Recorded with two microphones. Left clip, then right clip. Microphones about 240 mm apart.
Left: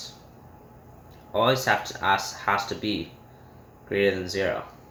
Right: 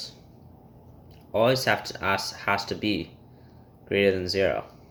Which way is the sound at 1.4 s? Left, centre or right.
Right.